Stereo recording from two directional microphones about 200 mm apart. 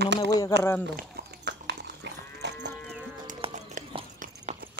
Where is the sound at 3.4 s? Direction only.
25° right (ahead or behind).